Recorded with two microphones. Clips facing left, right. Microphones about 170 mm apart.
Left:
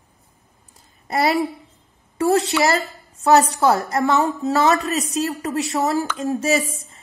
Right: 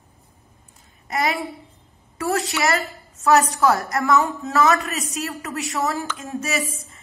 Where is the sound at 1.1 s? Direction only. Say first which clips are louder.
Left 5 dB; 35° left (ahead or behind).